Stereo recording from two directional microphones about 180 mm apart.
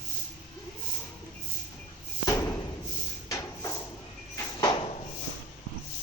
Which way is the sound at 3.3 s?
15° left (ahead or behind).